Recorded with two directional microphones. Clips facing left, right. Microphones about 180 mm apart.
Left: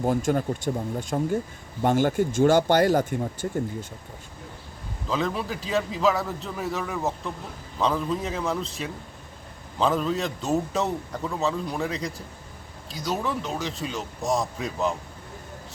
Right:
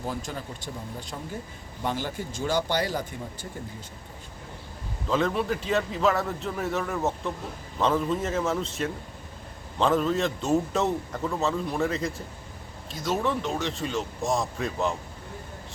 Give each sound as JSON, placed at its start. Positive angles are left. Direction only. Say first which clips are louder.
{"t": 0.0, "sound": "speech", "louder": "left 10 dB", "side_deg": 50}
{"t": 5.0, "sound": "a man's voice", "louder": "right 2 dB", "side_deg": 0}